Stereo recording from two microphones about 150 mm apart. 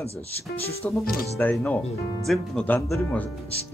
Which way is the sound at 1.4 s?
10° left (ahead or behind).